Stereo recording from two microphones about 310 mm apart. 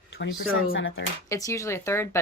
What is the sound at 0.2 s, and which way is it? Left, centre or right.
Speech, left.